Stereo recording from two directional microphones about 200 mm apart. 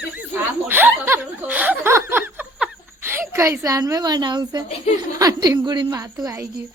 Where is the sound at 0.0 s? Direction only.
5° right (ahead or behind).